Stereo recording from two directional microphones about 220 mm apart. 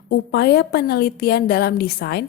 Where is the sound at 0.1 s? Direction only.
45° left (ahead or behind).